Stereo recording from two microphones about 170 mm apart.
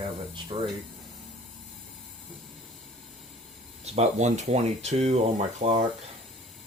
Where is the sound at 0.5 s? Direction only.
30° right (ahead or behind).